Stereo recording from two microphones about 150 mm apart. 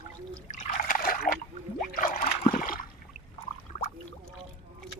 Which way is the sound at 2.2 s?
65° left (ahead or behind).